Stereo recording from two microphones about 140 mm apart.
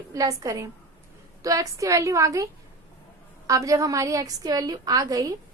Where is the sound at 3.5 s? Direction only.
25° right (ahead or behind).